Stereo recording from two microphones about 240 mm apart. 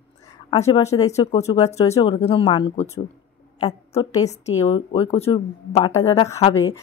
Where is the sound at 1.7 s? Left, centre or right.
Left.